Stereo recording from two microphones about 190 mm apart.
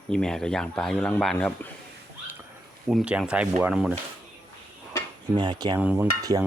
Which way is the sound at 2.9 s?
5° right (ahead or behind).